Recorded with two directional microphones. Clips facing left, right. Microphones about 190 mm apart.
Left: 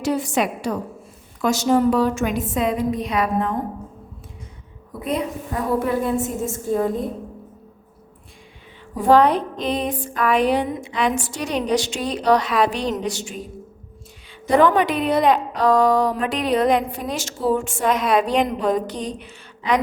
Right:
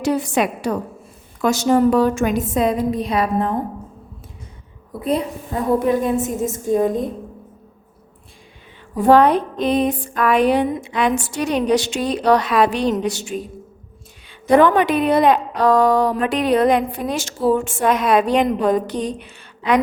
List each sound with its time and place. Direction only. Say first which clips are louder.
0.0 s a woman's voice: right 2 dB; 65° right (ahead or behind); by 3.5 s 35° right (ahead or behind)
5.0 s a woman's voice: right 3 dB; 35° right (ahead or behind)
5.8 s a woman's voice: right 3 dB; 20° right (ahead or behind)
9.0 s a woman's voice: right 2 dB; 60° right (ahead or behind)